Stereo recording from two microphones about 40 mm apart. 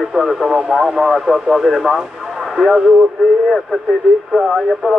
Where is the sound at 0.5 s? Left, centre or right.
Centre.